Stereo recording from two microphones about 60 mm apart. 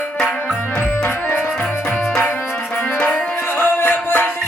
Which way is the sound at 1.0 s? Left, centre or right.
Left.